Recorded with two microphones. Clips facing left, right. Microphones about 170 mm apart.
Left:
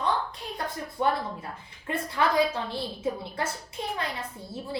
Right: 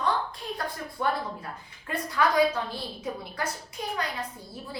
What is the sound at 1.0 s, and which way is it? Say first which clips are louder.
A woman's voice: left 2 dB; 20° left (ahead or behind).